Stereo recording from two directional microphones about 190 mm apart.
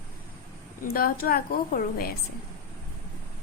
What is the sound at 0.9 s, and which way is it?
A woman's voice, 50° left (ahead or behind).